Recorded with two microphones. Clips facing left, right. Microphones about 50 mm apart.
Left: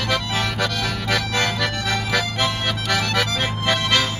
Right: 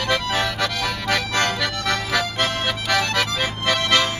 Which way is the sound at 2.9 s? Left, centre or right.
Centre.